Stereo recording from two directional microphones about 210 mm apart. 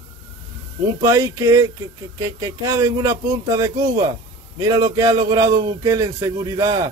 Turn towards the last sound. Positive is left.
turn(degrees=-20)  # may be behind; listen again after turning